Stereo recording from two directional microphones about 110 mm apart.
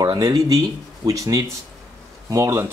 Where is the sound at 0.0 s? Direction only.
40° right (ahead or behind).